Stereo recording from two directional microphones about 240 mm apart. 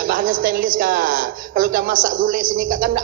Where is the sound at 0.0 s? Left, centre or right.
Right.